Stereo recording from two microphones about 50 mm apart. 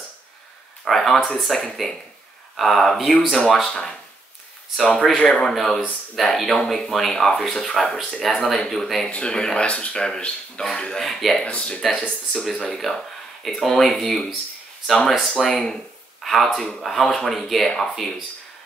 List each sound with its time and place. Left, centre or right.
0.8 s speech: centre
5.1 s speech: centre
5.5 s speech: centre
9.1 s speech: centre
11.1 s speech: centre
11.4 s speech: left
12.6 s speech: centre